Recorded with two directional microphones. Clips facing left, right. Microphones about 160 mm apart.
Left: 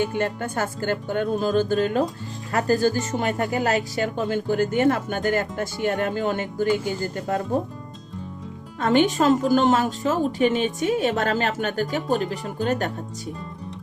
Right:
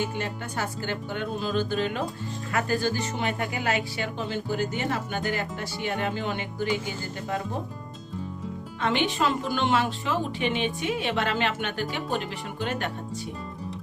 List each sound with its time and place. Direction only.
0.1 s a woman's voice: 50° left (ahead or behind)
8.8 s a woman's voice: 45° left (ahead or behind)